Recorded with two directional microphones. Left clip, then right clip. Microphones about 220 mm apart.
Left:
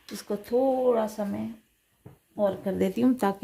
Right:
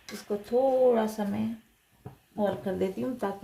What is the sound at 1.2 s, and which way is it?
Speech, 15° left (ahead or behind).